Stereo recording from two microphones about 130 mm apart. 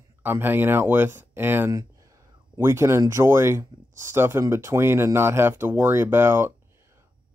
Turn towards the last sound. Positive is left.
turn(degrees=-20)  # may be behind; listen again after turning